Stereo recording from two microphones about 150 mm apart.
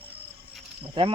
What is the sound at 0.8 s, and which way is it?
Cricket, 35° right (ahead or behind).